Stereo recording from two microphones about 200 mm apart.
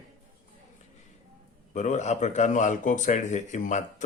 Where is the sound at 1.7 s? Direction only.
35° left (ahead or behind).